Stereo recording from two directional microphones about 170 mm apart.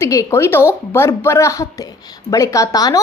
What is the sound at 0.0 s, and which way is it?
A woman's voice, 15° left (ahead or behind).